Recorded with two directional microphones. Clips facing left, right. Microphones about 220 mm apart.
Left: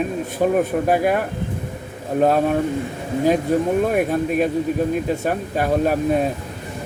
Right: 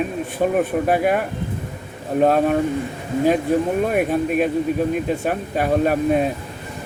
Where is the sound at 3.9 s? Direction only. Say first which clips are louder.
Even; 5° right (ahead or behind).